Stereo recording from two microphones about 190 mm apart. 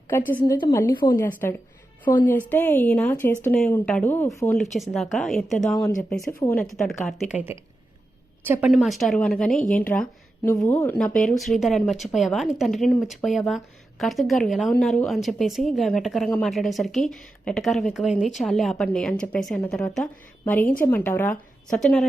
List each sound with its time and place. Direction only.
0.3 s a woman's voice: 10° left (ahead or behind)
4.8 s a woman's voice: centre (ahead or behind)
6.7 s a woman's voice: centre (ahead or behind)
8.7 s a woman's voice: centre (ahead or behind)